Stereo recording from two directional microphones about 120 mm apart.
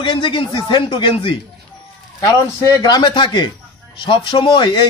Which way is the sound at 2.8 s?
35° left (ahead or behind).